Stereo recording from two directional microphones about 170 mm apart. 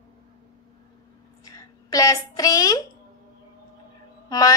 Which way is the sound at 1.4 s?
20° left (ahead or behind).